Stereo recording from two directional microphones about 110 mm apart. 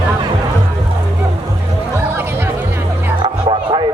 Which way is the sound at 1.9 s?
20° right (ahead or behind).